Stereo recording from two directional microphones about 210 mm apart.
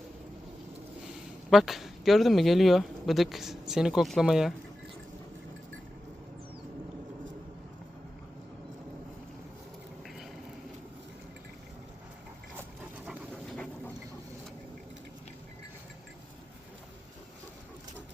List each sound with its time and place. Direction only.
1.0 s speech: centre (ahead or behind)
13.1 s dog: 5° left (ahead or behind)